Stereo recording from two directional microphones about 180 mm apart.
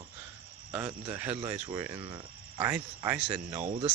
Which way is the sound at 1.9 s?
30° right (ahead or behind).